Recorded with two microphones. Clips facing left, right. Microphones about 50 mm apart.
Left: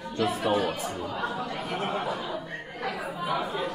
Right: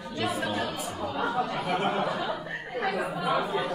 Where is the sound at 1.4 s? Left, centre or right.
Right.